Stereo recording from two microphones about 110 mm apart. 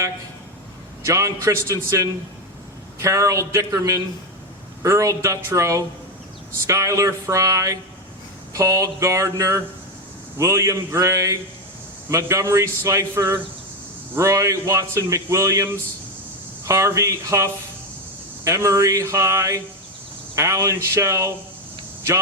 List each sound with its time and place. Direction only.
1.0 s a man's voice: 30° right (ahead or behind)